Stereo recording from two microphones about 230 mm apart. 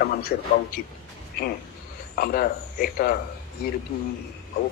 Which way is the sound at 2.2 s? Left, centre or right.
Left.